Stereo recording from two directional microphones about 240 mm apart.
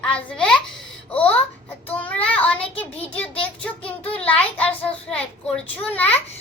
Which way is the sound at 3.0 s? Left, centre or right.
Centre.